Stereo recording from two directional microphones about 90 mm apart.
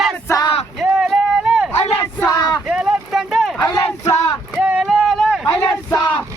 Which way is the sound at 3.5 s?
45° left (ahead or behind).